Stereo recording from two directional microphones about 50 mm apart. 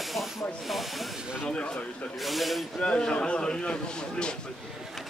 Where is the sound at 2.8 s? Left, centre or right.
Centre.